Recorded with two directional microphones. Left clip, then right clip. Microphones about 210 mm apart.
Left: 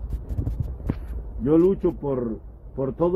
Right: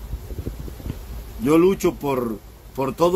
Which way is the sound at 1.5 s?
15° right (ahead or behind).